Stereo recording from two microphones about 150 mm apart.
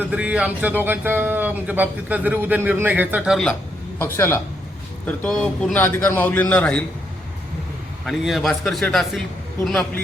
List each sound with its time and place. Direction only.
0.0 s a man's voice: 10° right (ahead or behind)
3.9 s a man's voice: 15° left (ahead or behind)
8.0 s a man's voice: centre (ahead or behind)